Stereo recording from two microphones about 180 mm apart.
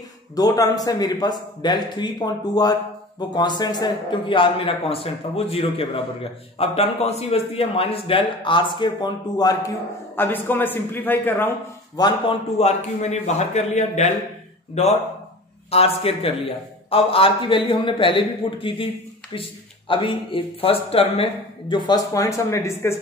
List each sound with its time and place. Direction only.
0.4 s a man's voice: 20° left (ahead or behind)
12.0 s a man's voice: 35° left (ahead or behind)
15.7 s a man's voice: 35° left (ahead or behind); by 22.9 s 15° left (ahead or behind)